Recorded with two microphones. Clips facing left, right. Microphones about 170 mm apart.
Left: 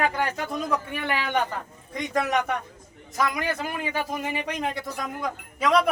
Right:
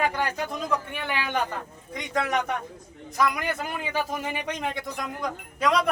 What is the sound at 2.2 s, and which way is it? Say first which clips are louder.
Speech: left 1 dB; 5° left (ahead or behind).